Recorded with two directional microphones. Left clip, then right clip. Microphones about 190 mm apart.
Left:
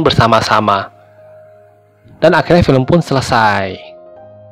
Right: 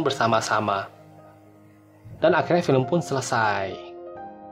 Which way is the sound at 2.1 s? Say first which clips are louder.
Left 10 dB; 30° left (ahead or behind).